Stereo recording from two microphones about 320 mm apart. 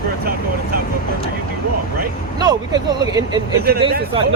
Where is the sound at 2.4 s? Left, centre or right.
Centre.